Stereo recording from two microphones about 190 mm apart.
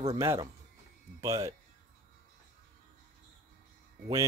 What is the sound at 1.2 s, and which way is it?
Speech, 15° right (ahead or behind).